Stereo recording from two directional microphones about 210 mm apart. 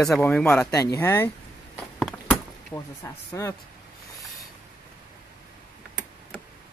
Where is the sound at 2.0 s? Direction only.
Centre (ahead or behind).